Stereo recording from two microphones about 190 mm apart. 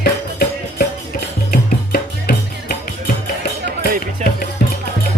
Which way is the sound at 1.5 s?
55° left (ahead or behind).